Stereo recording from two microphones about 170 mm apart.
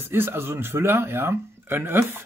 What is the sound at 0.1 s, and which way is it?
Speech, 15° right (ahead or behind).